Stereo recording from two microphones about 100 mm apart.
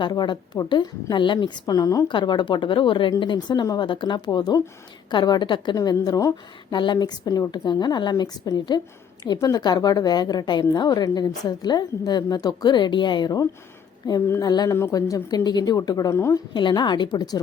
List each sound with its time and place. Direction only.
0.0 s a woman's voice: 50° left (ahead or behind)
2.0 s a woman's voice: 50° left (ahead or behind)
6.7 s a woman's voice: 50° left (ahead or behind)
16.1 s a woman's voice: 25° left (ahead or behind)
16.6 s a woman's voice: 50° left (ahead or behind)